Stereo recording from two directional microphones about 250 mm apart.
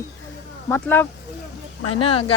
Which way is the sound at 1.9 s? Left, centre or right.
Left.